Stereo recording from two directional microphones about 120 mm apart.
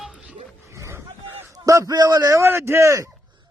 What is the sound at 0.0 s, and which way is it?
Roaring cats, 10° right (ahead or behind).